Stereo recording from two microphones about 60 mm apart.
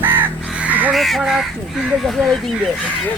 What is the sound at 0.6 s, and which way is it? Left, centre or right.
Crow, right.